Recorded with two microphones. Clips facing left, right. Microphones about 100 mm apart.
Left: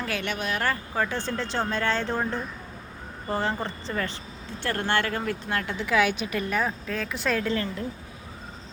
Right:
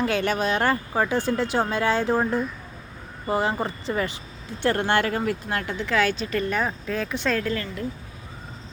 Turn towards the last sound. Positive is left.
turn(degrees=25)  # may be behind; listen again after turning